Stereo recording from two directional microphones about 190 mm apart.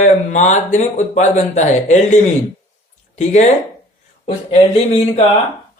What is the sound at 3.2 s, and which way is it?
Speech, 40° left (ahead or behind).